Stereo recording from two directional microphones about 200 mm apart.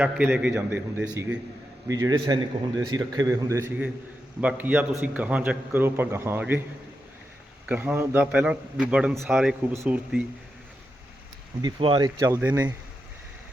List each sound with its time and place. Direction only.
0.0 s a man's voice: 10° right (ahead or behind)
7.7 s a man's voice: 10° right (ahead or behind)
11.6 s speech: 25° right (ahead or behind)